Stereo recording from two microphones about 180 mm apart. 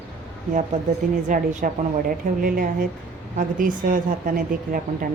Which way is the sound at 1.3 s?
50° right (ahead or behind).